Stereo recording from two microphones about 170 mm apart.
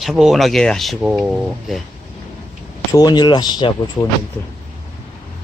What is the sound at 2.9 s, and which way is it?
Speech, 25° left (ahead or behind).